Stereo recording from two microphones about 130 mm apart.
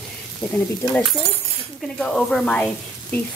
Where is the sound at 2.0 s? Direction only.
5° left (ahead or behind).